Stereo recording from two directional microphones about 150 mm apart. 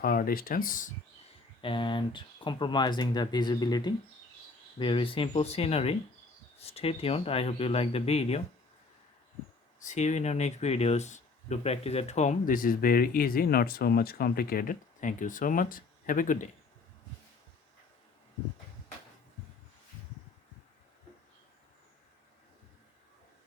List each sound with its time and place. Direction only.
0.0 s speech: 75° left (ahead or behind)
1.6 s speech: 35° left (ahead or behind)
9.8 s speech: 50° left (ahead or behind)